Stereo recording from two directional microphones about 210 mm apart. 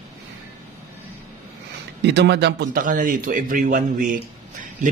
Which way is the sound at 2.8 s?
40° right (ahead or behind).